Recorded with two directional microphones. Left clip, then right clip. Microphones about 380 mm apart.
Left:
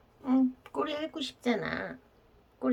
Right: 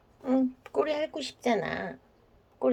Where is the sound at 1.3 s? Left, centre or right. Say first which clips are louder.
Right 3 dB; centre.